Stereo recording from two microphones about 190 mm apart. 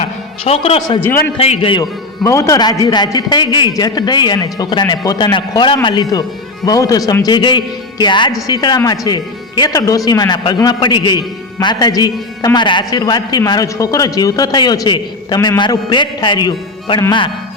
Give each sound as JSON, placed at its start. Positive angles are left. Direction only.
{"t": 0.0, "sound": "a man's voice", "side_deg": 30}